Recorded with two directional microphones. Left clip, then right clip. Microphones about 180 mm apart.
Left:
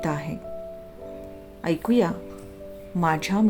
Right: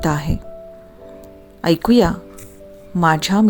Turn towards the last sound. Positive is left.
turn(degrees=-45)  # may be behind; listen again after turning